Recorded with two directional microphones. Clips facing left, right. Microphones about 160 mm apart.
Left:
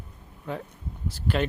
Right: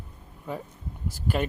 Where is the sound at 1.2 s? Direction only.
10° right (ahead or behind).